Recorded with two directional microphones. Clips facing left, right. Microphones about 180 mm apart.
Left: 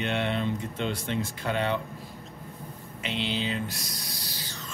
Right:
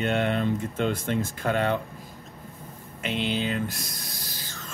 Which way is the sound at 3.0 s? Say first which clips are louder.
Right 3 dB; 55° right (ahead or behind).